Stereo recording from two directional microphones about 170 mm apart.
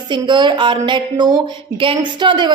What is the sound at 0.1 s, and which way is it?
A woman's voice, 25° right (ahead or behind).